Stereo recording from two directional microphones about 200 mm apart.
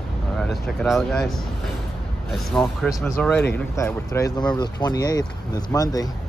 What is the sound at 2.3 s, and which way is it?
Speech, 5° left (ahead or behind).